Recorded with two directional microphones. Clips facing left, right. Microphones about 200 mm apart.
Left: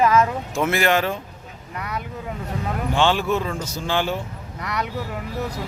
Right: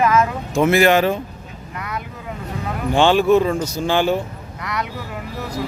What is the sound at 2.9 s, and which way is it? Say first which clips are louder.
Speech: right 7 dB; 15° right (ahead or behind).